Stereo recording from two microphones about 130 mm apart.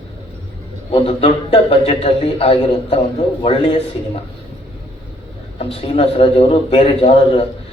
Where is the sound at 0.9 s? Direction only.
45° left (ahead or behind).